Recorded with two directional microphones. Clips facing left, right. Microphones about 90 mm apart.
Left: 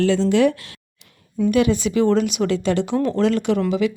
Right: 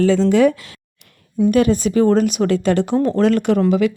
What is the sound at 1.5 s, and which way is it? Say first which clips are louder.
A woman's voice: right 2 dB; 45° right (ahead or behind).